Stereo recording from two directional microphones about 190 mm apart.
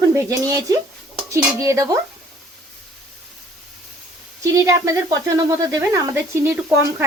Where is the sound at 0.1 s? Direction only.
15° right (ahead or behind).